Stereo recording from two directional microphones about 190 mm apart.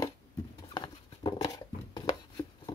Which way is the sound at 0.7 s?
20° left (ahead or behind).